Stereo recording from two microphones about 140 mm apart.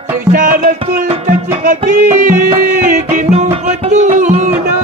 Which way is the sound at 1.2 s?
65° right (ahead or behind).